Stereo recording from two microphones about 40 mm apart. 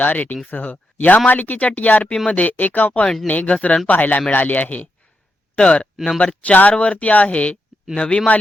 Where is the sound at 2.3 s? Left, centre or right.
Left.